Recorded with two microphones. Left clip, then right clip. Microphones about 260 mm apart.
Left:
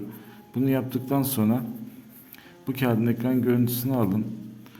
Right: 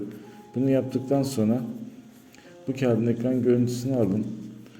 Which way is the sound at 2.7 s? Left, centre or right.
Centre.